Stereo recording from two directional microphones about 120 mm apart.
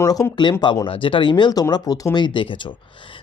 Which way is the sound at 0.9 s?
45° left (ahead or behind).